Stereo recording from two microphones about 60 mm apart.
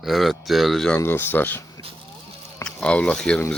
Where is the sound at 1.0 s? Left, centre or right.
Left.